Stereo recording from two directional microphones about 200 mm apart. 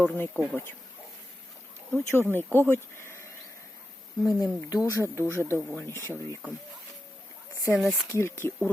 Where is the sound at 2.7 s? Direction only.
10° left (ahead or behind).